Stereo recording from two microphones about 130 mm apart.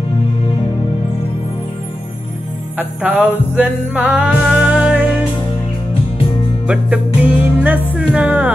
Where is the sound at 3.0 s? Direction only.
10° right (ahead or behind).